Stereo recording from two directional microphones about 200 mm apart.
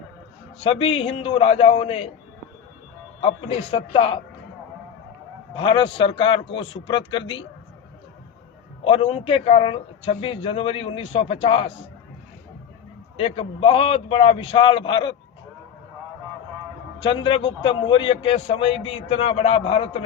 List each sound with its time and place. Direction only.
0.6 s a man's voice: 30° left (ahead or behind)
3.2 s a man's voice: 30° left (ahead or behind)
5.5 s a man's voice: 25° left (ahead or behind)
8.8 s a man's voice: 30° left (ahead or behind)
13.1 s a man's voice: 30° left (ahead or behind)
17.0 s a man's voice: 25° left (ahead or behind)